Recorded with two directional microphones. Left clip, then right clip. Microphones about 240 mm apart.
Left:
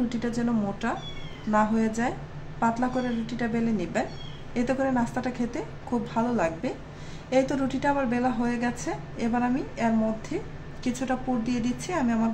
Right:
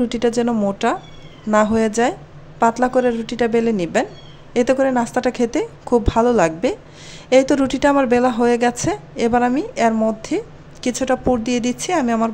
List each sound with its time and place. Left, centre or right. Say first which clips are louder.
0.1 s a woman's voice: right 11 dB; right